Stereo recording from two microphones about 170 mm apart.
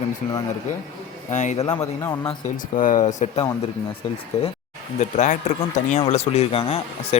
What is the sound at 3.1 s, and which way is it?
Speech, 45° left (ahead or behind).